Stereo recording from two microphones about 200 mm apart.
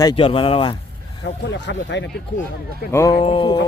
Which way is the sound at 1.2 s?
60° left (ahead or behind).